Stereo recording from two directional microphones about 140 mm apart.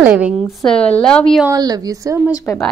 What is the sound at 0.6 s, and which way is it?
Speech, 5° left (ahead or behind).